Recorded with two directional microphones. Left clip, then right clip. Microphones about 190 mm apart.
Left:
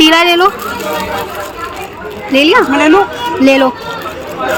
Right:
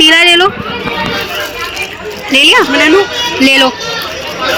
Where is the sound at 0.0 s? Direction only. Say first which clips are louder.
Right 2 dB; 10° left (ahead or behind).